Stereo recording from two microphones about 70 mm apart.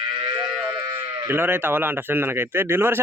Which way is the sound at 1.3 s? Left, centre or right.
Right.